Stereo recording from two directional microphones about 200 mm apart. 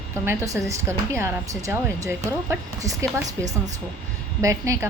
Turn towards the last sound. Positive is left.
turn(degrees=-15)  # may be behind; listen again after turning